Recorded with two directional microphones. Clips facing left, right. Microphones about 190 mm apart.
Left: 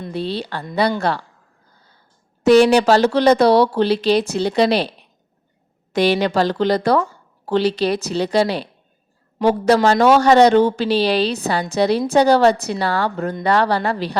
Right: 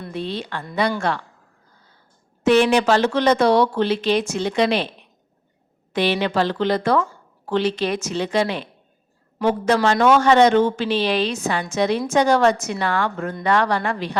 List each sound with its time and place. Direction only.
0.1 s speech: 35° left (ahead or behind)
2.5 s speech: 35° left (ahead or behind)